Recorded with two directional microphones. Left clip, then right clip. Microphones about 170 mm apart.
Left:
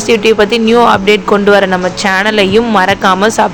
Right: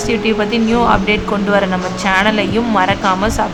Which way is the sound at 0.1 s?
30° left (ahead or behind).